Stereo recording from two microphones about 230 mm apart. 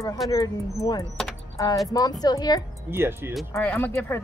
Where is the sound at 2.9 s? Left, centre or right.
Centre.